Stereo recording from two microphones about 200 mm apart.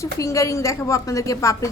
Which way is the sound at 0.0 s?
15° left (ahead or behind).